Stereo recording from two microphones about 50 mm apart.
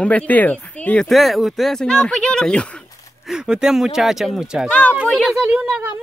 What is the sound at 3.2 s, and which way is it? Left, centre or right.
Speech, centre.